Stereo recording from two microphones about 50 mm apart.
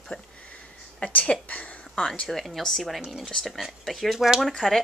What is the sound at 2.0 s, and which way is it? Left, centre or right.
Speech, centre.